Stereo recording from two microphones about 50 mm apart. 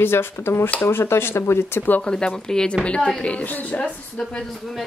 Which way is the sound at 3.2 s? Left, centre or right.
Left.